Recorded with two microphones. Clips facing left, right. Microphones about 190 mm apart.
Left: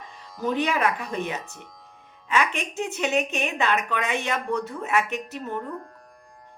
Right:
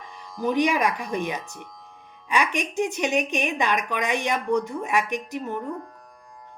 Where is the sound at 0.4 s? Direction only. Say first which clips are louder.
Right 2 dB; 15° right (ahead or behind).